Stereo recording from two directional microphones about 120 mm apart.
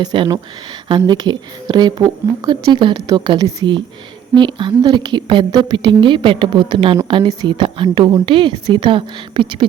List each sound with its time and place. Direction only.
0.0 s a woman's voice: 40° right (ahead or behind)